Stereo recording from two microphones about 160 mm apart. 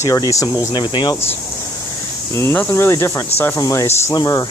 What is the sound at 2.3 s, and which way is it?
Speech, 15° left (ahead or behind).